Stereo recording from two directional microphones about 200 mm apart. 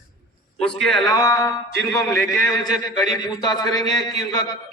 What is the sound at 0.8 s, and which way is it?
Speech, centre (ahead or behind).